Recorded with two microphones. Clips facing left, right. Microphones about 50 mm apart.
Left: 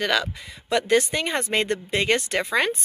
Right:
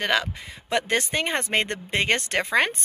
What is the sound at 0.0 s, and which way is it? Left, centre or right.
Speech, right.